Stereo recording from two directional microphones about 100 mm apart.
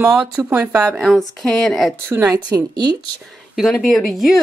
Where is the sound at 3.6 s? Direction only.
Centre (ahead or behind).